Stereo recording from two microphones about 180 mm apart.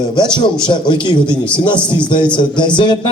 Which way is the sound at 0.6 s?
25° left (ahead or behind).